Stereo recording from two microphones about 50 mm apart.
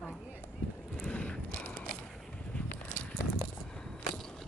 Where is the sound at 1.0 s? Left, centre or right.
Left.